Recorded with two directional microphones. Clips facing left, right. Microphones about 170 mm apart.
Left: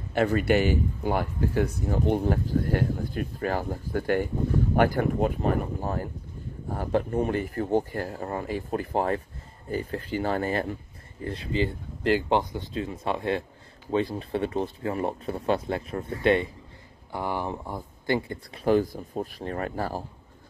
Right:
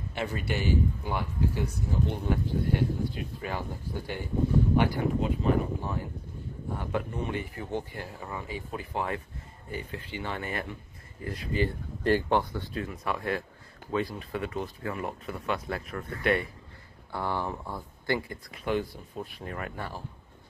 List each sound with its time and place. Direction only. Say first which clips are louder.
0.1 s speech: left 10 dB; 55° left (ahead or behind)
2.2 s speech: left 3 dB; 45° left (ahead or behind)
11.2 s speech: left 2 dB; 25° left (ahead or behind)
17.1 s speech: left 2 dB; 15° left (ahead or behind); by 20.0 s 35° left (ahead or behind)